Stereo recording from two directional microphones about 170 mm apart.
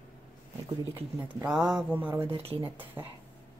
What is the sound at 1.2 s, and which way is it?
Speech, 5° right (ahead or behind).